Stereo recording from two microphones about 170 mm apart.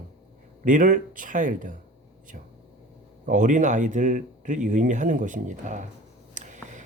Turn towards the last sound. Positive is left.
turn(degrees=-45)  # may be behind; listen again after turning